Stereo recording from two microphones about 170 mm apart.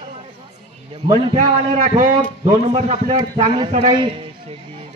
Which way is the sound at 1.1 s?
50° right (ahead or behind).